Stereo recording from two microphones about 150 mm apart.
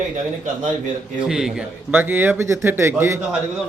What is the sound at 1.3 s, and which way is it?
A man's voice, 5° right (ahead or behind).